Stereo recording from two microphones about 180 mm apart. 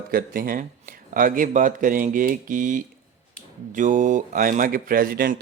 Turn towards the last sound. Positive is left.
turn(degrees=-55)  # may be behind; listen again after turning